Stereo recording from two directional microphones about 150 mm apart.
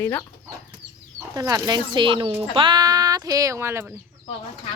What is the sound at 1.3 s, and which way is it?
Speech, 20° right (ahead or behind).